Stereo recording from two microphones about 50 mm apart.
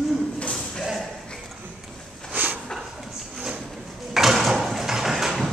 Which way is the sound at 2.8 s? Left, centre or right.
Centre.